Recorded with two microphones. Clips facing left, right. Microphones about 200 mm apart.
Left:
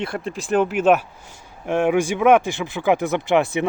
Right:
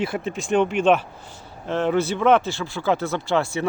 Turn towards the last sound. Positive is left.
turn(degrees=20)  # may be behind; listen again after turning